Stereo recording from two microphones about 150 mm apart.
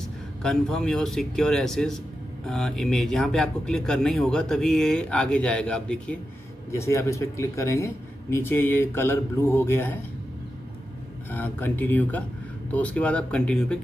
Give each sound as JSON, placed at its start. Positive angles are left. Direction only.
{"t": 0.4, "sound": "speech", "side_deg": 5}
{"t": 6.7, "sound": "speech", "side_deg": 20}
{"t": 11.2, "sound": "speech", "side_deg": 15}